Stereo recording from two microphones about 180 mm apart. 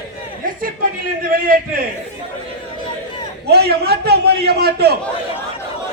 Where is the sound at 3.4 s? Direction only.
65° right (ahead or behind).